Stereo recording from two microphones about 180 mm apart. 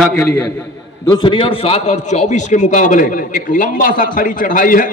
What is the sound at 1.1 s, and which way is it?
A man's voice, 25° left (ahead or behind).